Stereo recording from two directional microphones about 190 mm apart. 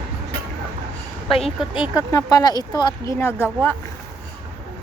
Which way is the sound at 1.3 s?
30° left (ahead or behind).